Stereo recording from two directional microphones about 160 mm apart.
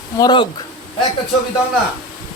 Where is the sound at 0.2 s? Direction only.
25° left (ahead or behind).